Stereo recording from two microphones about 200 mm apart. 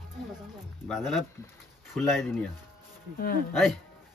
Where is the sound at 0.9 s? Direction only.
Centre (ahead or behind).